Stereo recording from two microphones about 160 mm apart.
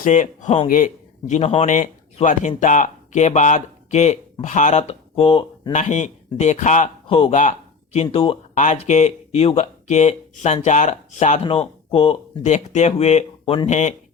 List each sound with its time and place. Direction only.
0.0 s speech: 50° left (ahead or behind); by 5.7 s 35° left (ahead or behind)
5.7 s speech: 50° left (ahead or behind)
7.1 s speech: 35° left (ahead or behind)
8.5 s speech: 50° left (ahead or behind)